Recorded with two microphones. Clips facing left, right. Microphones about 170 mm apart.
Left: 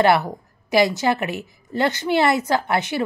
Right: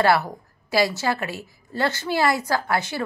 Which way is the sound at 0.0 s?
20° left (ahead or behind).